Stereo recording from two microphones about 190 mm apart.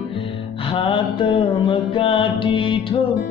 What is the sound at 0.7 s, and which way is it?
Mantra, 30° left (ahead or behind).